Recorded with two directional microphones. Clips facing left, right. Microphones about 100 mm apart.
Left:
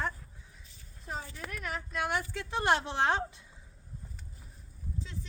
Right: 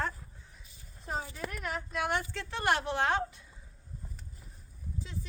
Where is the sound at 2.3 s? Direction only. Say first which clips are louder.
Left 2 dB; 15° left (ahead or behind).